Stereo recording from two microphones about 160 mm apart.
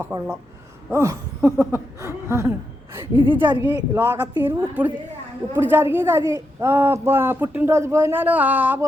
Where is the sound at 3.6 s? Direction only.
10° right (ahead or behind).